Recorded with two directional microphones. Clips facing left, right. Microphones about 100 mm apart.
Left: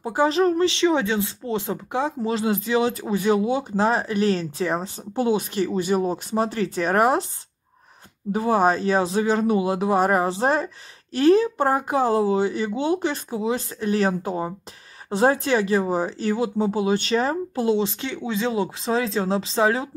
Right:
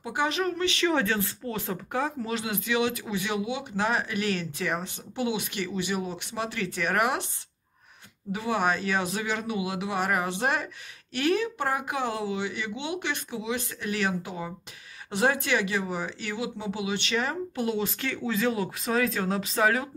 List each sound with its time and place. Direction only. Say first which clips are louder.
0.0 s speech: left 8 dB; 35° left (ahead or behind)
0.8 s speech: left 5 dB; 20° left (ahead or behind); by 7.2 s 35° left (ahead or behind)
8.3 s speech: left 7 dB; 40° left (ahead or behind)